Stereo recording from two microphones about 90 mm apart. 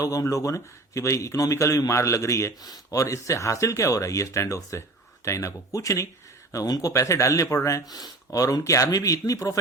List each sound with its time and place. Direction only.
0.0 s a man's voice: 40° left (ahead or behind)